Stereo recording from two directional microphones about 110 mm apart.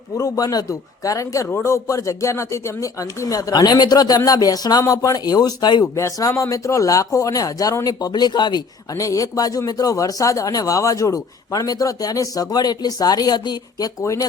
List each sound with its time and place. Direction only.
0.2 s speech: 35° left (ahead or behind)
6.0 s speech: 30° left (ahead or behind)